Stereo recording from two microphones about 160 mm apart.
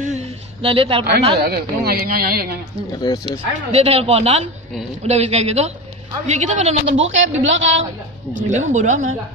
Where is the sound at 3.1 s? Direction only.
25° left (ahead or behind).